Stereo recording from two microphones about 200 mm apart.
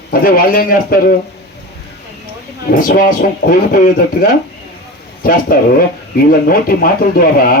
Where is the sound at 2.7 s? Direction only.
45° left (ahead or behind).